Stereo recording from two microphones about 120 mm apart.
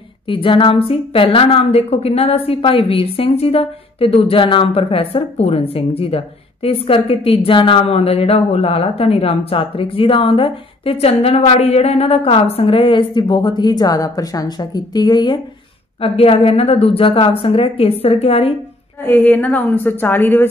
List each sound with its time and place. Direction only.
0.3 s a woman's voice: 45° left (ahead or behind)
16.0 s a woman's voice: 50° left (ahead or behind)
19.0 s a woman's voice: 15° left (ahead or behind)